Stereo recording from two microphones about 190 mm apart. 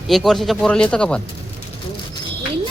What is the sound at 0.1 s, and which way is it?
Speech, centre (ahead or behind).